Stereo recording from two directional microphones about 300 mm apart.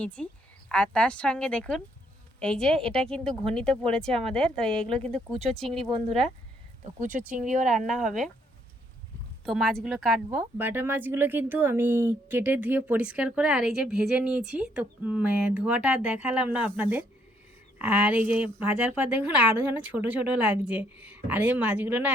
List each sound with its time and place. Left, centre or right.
0.0 s speech: centre
7.0 s speech: right
7.9 s speech: centre
9.5 s speech: centre